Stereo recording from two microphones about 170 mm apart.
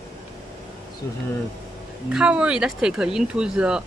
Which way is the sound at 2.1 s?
5° right (ahead or behind).